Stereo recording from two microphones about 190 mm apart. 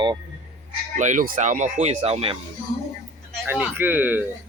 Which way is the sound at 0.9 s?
40° right (ahead or behind).